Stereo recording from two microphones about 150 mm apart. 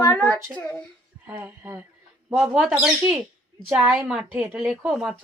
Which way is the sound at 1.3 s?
15° right (ahead or behind).